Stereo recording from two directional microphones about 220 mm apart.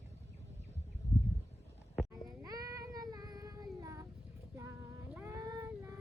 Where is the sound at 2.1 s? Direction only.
15° right (ahead or behind).